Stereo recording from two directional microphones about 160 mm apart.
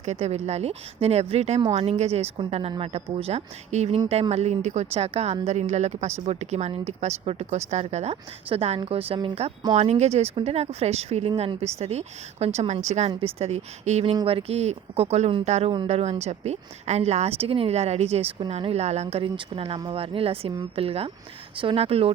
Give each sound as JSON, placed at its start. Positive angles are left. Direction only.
{"t": 0.0, "sound": "speech", "side_deg": -45}